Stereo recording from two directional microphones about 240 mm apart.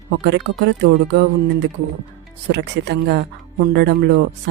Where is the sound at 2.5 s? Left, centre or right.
Right.